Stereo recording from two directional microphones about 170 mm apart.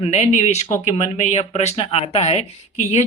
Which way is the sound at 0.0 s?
40° left (ahead or behind).